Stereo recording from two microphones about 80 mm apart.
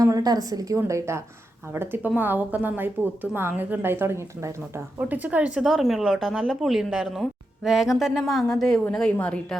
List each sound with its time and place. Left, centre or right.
0.0 s a woman's voice: right
0.8 s a woman's voice: right; by 5.6 s centre
5.6 s a woman's voice: centre